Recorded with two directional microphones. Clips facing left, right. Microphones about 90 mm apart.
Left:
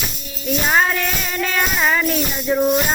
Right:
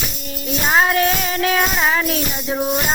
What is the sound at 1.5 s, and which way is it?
Music, 10° right (ahead or behind).